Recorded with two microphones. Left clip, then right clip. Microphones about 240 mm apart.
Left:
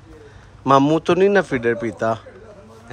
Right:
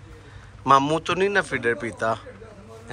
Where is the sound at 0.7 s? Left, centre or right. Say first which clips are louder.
Left 3 dB; centre.